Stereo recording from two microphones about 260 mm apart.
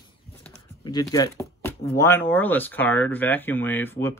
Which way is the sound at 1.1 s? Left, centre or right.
Centre.